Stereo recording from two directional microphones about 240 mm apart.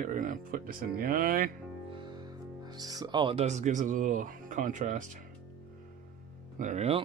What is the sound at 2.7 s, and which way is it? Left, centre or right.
Speech, centre.